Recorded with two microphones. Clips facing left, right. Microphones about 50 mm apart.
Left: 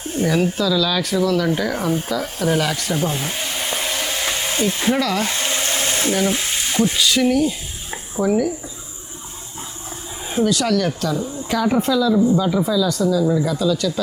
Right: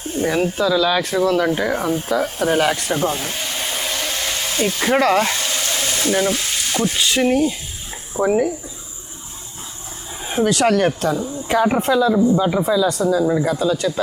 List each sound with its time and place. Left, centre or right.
0.2 s speech: centre
0.6 s speech: right
1.5 s speech: centre
1.8 s speech: centre
2.4 s speech: right
2.9 s speech: centre
3.2 s hair dryer: centre
4.8 s speech: right
5.4 s a sound: left
6.2 s frying: left
6.9 s speech: right
10.4 s speech: right